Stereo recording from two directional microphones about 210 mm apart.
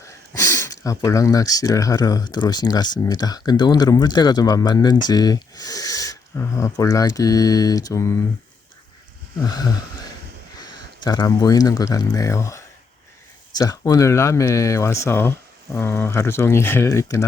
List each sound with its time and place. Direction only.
0.0 s speech: 15° left (ahead or behind)
9.4 s speech: 20° left (ahead or behind)
11.0 s speech: 20° left (ahead or behind)